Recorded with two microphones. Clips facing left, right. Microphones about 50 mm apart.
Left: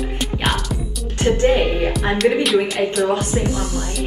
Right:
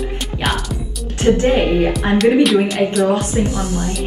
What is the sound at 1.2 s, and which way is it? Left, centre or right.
Speech, right.